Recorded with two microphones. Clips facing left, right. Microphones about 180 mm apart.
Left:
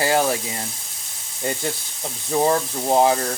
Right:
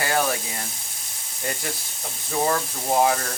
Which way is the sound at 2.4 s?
25° left (ahead or behind).